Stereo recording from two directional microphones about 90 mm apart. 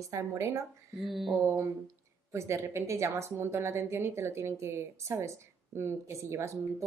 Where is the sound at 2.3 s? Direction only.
30° right (ahead or behind).